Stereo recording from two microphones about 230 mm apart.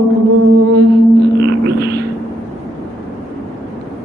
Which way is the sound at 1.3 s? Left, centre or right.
Right.